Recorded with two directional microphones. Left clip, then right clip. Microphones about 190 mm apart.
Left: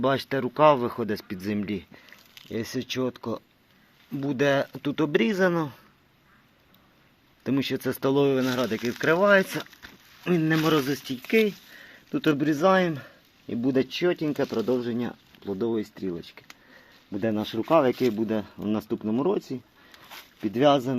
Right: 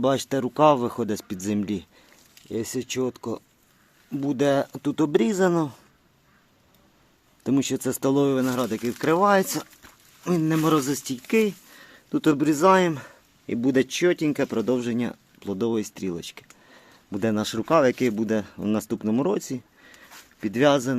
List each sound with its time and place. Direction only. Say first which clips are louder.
0.0 s speech: right 2 dB; 20° right (ahead or behind)
2.5 s speech: right 2 dB; 10° right (ahead or behind)
7.4 s speech: right 2 dB; 20° right (ahead or behind)